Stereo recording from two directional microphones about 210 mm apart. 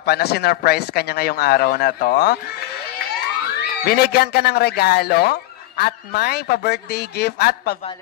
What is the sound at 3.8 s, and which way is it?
Speech, 45° left (ahead or behind).